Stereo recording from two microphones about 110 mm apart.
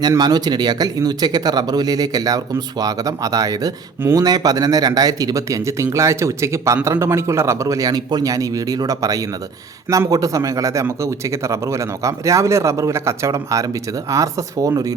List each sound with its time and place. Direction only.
0.2 s speech: 40° right (ahead or behind)